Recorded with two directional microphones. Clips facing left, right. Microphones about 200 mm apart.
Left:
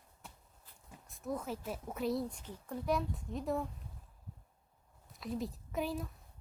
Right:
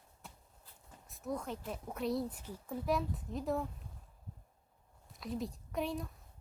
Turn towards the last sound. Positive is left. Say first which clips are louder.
# even
turn(degrees=0)  # may be behind; listen again after turning